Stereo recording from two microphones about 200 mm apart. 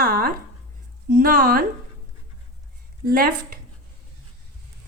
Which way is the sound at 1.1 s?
45° right (ahead or behind).